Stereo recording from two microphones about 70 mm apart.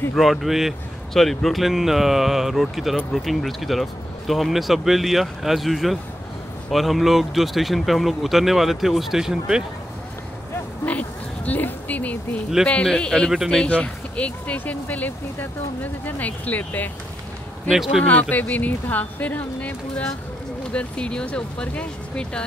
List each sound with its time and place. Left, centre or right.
0.1 s speech: centre
10.9 s a sound: left
12.6 s speech: centre
18.3 s speech: left